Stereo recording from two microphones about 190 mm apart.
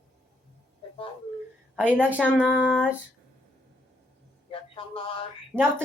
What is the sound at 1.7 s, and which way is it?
Speech, 10° right (ahead or behind).